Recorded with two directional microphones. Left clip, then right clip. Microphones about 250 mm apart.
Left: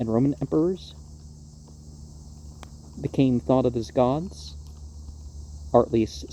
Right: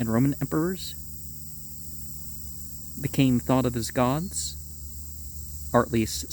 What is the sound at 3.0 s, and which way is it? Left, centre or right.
Speech, right.